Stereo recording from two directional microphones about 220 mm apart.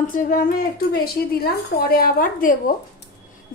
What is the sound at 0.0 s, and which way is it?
Speech, 40° left (ahead or behind).